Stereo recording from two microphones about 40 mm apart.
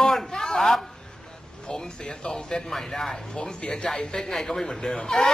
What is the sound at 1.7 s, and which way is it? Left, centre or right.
Speech, centre.